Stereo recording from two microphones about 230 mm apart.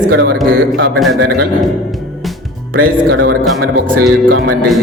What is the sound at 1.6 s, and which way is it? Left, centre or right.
Music, centre.